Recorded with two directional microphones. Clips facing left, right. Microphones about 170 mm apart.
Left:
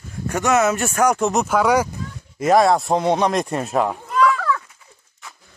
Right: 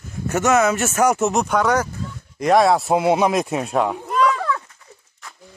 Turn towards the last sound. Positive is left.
turn(degrees=-20)  # may be behind; listen again after turning